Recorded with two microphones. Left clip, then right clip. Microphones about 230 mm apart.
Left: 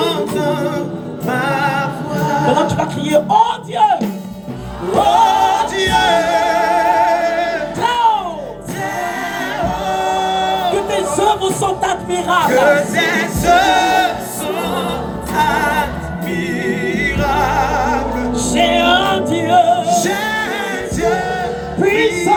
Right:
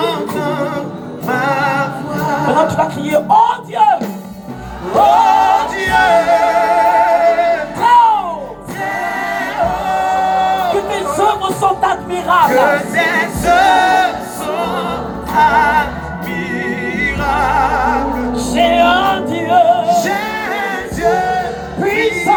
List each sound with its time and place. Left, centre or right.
0.0 s music: left
5.0 s music: left
9.8 s music: left
11.8 s music: left
21.8 s music: left